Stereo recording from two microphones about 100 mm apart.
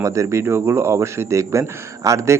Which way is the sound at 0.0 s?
30° right (ahead or behind).